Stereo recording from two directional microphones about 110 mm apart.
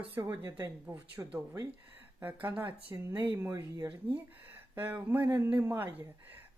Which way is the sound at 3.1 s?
40° right (ahead or behind).